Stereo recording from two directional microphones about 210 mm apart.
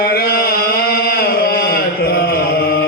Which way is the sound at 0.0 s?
45° left (ahead or behind).